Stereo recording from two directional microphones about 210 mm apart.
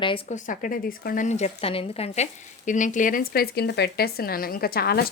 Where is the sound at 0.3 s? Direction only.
40° left (ahead or behind).